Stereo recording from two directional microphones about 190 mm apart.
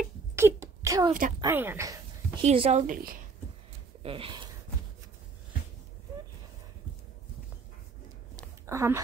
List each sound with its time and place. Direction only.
0.4 s speech: 15° right (ahead or behind)
2.4 s speech: 35° right (ahead or behind)
2.9 s a woman's voice: 50° right (ahead or behind)
4.0 s speech: 30° right (ahead or behind)
8.6 s speech: 15° right (ahead or behind)